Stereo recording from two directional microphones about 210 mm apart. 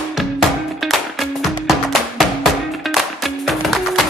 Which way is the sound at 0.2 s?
Centre (ahead or behind).